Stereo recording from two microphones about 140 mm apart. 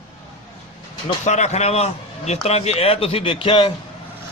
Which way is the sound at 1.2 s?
55° left (ahead or behind).